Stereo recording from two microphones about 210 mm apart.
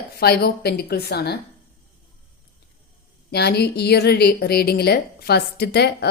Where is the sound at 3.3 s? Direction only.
50° left (ahead or behind).